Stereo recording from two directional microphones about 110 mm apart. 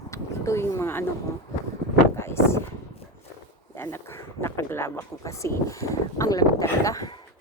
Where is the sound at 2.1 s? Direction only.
25° left (ahead or behind).